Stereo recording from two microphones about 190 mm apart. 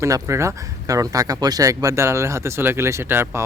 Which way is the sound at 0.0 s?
15° right (ahead or behind).